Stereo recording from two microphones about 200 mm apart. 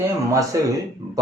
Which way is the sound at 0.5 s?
15° right (ahead or behind).